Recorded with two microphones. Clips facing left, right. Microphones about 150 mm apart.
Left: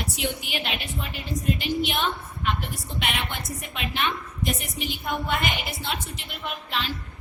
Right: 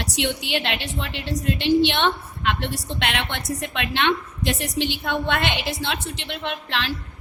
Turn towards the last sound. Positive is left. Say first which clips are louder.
# right 4 dB
turn(degrees=-85)